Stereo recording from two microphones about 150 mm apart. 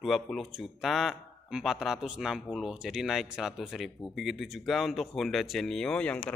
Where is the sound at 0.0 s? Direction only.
Centre (ahead or behind).